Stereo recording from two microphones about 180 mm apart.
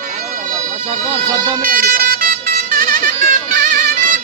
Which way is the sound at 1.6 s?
50° right (ahead or behind).